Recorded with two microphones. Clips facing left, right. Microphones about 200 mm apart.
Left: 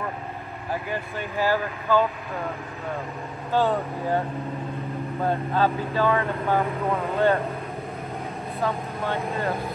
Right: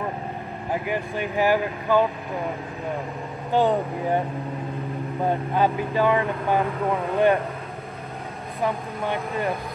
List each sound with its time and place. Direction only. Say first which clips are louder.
0.8 s speech: right 4 dB; 15° right (ahead or behind)
3.5 s speech: right 2 dB; 15° right (ahead or behind)
5.2 s speech: right 1 dB; 15° right (ahead or behind)
8.5 s speech: right 2 dB; 15° right (ahead or behind)